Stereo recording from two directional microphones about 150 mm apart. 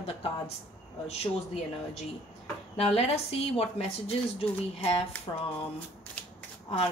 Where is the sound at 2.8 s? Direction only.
45° left (ahead or behind).